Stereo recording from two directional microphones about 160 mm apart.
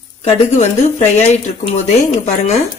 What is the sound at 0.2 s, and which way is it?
Speech, 45° left (ahead or behind).